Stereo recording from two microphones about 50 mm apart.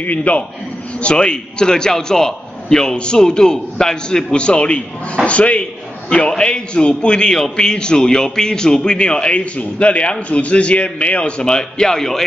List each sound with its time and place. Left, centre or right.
0.0 s a man's voice: left; by 12.3 s centre